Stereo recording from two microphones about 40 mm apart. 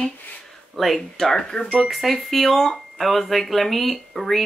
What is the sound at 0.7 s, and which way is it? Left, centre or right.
Speech, centre.